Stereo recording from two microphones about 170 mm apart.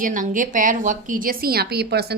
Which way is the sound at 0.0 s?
50° right (ahead or behind).